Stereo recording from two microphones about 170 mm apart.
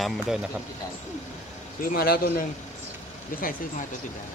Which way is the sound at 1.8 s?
60° left (ahead or behind).